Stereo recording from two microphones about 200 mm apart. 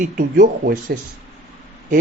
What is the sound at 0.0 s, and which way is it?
Speech, 45° right (ahead or behind).